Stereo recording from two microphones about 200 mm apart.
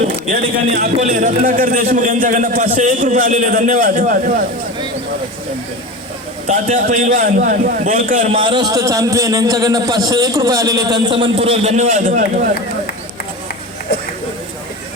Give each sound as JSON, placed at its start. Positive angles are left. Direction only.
{"t": 0.5, "sound": "a man's voice", "side_deg": -40}
{"t": 6.8, "sound": "a man's voice", "side_deg": -40}
{"t": 8.4, "sound": "a man's voice", "side_deg": -25}